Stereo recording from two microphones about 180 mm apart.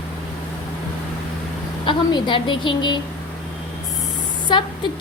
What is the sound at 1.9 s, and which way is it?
A woman's voice, 25° left (ahead or behind).